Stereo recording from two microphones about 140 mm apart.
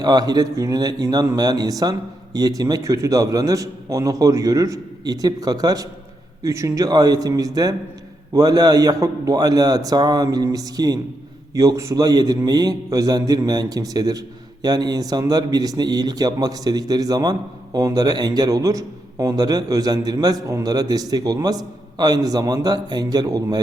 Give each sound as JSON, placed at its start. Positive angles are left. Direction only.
{"t": 0.0, "sound": "a man's voice", "side_deg": -30}